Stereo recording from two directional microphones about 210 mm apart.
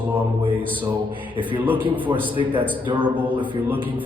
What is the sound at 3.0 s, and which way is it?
Speech, 10° right (ahead or behind).